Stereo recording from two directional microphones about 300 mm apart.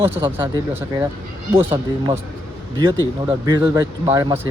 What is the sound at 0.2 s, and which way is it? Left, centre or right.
Speech, centre.